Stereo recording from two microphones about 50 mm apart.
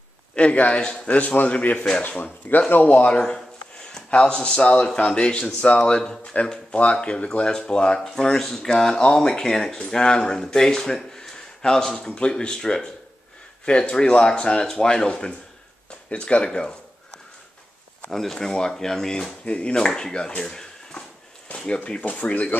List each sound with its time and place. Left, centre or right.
0.3 s a man's voice: left
3.2 s speech: centre
18.1 s speech: centre
19.4 s speech: left
22.1 s speech: left